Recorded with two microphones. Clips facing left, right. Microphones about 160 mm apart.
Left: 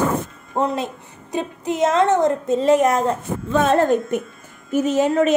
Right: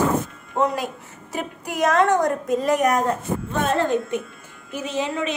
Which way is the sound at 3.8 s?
45° left (ahead or behind).